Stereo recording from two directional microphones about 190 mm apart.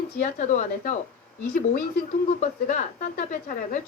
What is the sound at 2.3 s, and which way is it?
Speech, 40° left (ahead or behind).